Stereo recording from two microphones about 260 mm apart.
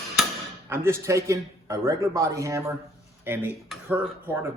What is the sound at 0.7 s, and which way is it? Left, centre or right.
Speech, centre.